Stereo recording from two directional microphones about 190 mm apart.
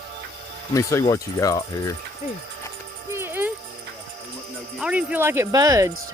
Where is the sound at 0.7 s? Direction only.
15° left (ahead or behind).